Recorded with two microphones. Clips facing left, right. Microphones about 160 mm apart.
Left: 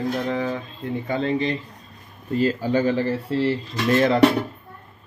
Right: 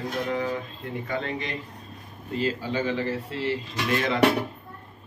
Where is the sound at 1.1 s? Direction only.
30° left (ahead or behind).